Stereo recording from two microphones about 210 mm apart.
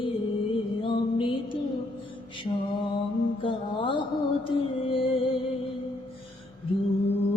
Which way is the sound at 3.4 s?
25° left (ahead or behind).